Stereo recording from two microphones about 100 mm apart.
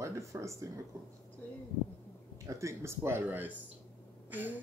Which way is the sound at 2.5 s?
30° right (ahead or behind).